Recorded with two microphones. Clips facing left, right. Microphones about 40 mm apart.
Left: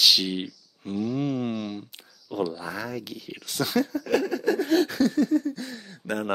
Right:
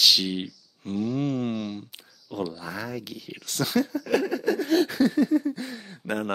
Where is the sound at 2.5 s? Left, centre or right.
Centre.